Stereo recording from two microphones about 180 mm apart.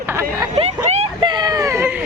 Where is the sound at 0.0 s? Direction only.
15° right (ahead or behind).